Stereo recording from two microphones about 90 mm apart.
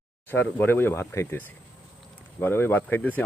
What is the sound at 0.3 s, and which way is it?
Speech, 25° left (ahead or behind).